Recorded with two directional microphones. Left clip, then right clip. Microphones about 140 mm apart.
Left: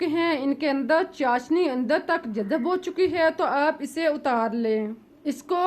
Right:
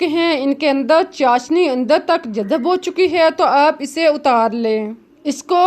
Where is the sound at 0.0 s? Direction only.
40° right (ahead or behind).